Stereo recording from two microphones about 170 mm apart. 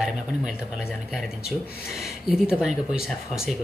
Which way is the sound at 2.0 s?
Centre (ahead or behind).